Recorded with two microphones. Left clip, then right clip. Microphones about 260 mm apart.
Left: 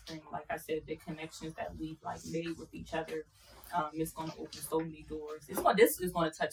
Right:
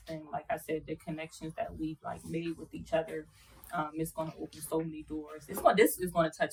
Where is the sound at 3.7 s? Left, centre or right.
Centre.